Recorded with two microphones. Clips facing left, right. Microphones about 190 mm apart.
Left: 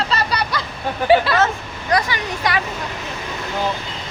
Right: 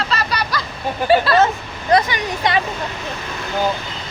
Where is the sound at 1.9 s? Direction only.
20° right (ahead or behind).